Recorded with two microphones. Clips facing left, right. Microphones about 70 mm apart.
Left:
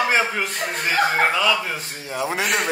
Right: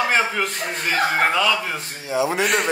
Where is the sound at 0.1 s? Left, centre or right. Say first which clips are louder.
Even; centre.